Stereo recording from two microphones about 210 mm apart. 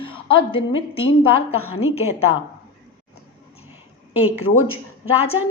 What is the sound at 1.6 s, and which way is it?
Speech, 85° left.